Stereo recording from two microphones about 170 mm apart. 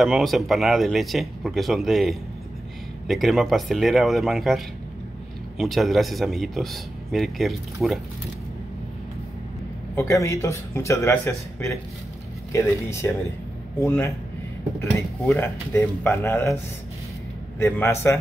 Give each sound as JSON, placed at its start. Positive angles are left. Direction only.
{"t": 0.0, "sound": "speech", "side_deg": 0}
{"t": 9.9, "sound": "speech", "side_deg": 15}